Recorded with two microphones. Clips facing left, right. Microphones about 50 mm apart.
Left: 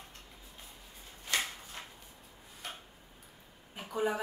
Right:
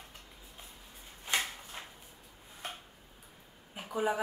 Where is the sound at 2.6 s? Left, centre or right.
Right.